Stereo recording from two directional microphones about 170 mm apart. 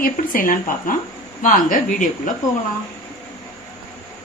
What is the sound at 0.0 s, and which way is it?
Speech, 55° left (ahead or behind).